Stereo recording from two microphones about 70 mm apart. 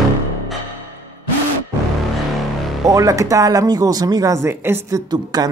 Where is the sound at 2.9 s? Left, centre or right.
Right.